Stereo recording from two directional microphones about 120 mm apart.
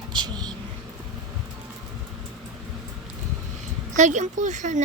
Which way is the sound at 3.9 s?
85° right.